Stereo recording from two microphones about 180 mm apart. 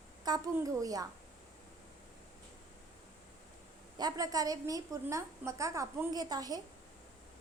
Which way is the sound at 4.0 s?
20° right (ahead or behind).